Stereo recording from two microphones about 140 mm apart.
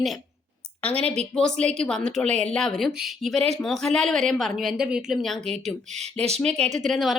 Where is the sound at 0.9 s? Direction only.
45° right (ahead or behind).